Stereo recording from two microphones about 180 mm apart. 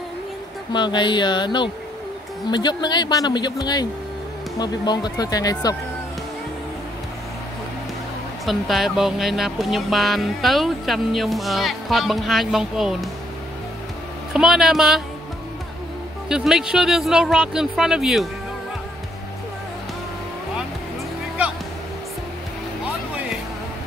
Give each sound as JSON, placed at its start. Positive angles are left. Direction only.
{"t": 0.7, "sound": "speech", "side_deg": 25}
{"t": 8.5, "sound": "speech", "side_deg": 0}
{"t": 14.3, "sound": "speech", "side_deg": -5}
{"t": 16.3, "sound": "speech", "side_deg": -5}